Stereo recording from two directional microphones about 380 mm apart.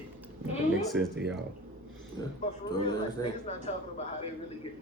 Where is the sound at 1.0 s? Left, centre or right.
Centre.